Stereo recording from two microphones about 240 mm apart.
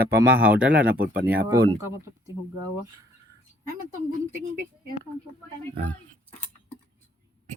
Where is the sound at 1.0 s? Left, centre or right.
Right.